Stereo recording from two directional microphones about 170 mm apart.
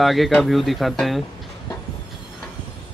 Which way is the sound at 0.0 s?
Centre (ahead or behind).